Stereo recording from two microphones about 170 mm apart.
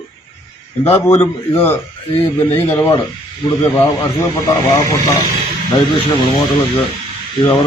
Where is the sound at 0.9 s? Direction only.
35° left (ahead or behind).